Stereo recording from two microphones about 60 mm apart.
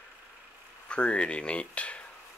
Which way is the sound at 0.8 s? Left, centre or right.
Centre.